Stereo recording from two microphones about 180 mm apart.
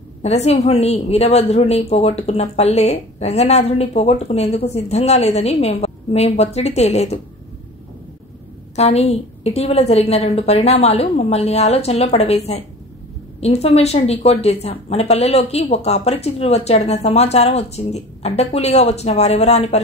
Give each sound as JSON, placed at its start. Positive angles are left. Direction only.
{"t": 0.2, "sound": "a woman's voice", "side_deg": 35}
{"t": 8.7, "sound": "a woman's voice", "side_deg": 35}